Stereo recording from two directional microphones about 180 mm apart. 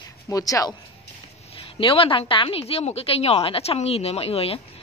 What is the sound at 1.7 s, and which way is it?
A woman's voice, 30° left (ahead or behind).